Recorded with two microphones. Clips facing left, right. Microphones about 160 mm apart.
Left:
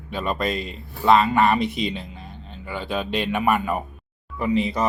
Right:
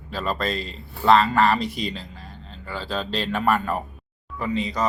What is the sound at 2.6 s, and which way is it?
Speech, 15° left (ahead or behind).